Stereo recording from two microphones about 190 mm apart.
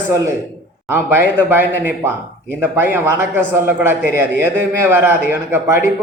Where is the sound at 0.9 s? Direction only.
10° right (ahead or behind).